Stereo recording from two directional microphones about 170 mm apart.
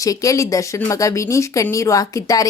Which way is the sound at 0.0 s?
20° left (ahead or behind).